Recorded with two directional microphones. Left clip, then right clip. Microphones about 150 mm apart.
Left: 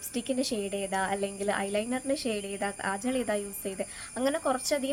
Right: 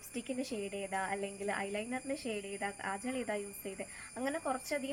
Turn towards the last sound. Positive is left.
turn(degrees=30)  # may be behind; listen again after turning